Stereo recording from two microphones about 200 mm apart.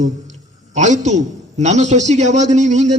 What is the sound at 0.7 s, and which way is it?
A man's voice, 35° right (ahead or behind).